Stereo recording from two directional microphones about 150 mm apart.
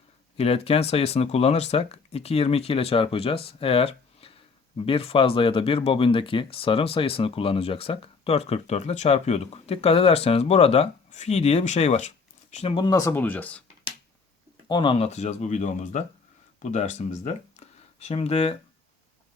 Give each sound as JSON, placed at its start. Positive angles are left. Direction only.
{"t": 0.3, "sound": "speech", "side_deg": 40}
{"t": 12.7, "sound": "speech", "side_deg": 25}
{"t": 14.7, "sound": "speech", "side_deg": 30}